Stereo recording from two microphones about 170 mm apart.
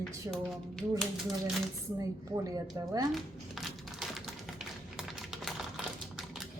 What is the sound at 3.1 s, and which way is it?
Crumpling, centre (ahead or behind).